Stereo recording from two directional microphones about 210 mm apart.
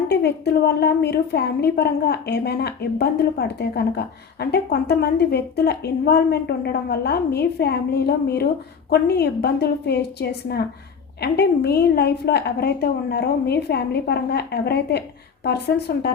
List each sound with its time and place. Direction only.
0.1 s a woman's voice: 50° left (ahead or behind)